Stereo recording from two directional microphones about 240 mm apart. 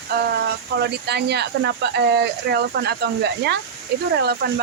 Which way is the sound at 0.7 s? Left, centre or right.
Right.